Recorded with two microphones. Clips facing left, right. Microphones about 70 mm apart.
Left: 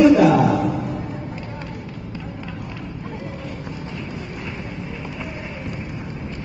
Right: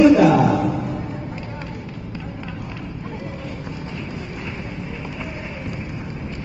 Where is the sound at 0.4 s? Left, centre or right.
Centre.